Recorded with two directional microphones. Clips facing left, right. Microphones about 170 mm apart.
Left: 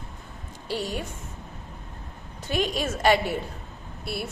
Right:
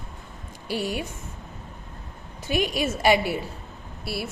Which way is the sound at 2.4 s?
10° right (ahead or behind).